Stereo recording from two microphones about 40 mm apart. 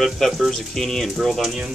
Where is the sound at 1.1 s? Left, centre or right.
Centre.